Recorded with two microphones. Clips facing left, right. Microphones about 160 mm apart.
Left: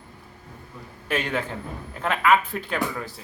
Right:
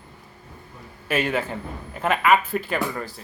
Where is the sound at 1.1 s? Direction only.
5° right (ahead or behind).